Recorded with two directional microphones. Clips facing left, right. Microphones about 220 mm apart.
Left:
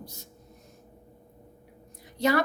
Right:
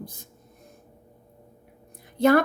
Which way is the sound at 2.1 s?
55° right (ahead or behind).